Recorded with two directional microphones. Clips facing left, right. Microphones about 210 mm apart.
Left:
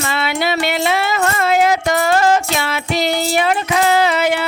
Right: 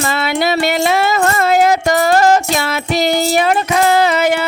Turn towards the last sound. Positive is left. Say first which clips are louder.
# right 2 dB
turn(degrees=-45)  # may be behind; listen again after turning